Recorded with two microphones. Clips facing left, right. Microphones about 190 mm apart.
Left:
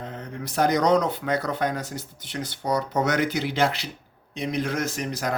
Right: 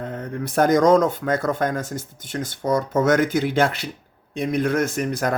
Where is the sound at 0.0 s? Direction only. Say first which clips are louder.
Right 6 dB; 55° right (ahead or behind).